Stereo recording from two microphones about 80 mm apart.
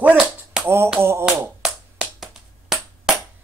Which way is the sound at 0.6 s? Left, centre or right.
Right.